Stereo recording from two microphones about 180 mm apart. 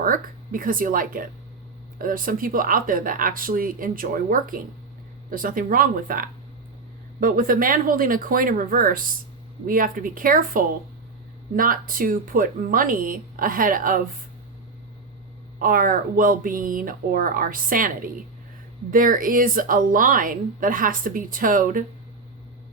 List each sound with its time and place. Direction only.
0.0 s a woman's voice: 50° right (ahead or behind)
15.5 s a woman's voice: 50° right (ahead or behind)